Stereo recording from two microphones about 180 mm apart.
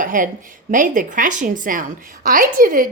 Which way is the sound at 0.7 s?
50° right (ahead or behind).